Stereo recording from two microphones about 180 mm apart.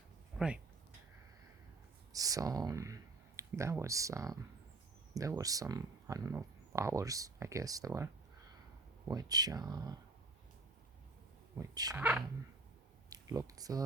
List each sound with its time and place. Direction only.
0.3 s speech: 5° right (ahead or behind)
2.1 s speech: 20° right (ahead or behind)
5.4 s speech: 20° right (ahead or behind)
11.5 s speech: 20° right (ahead or behind)
11.9 s speech: 10° right (ahead or behind)
13.1 s speech: 20° right (ahead or behind)